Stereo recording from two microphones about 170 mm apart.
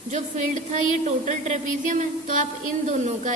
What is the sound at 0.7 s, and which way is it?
A woman's voice, 45° right (ahead or behind).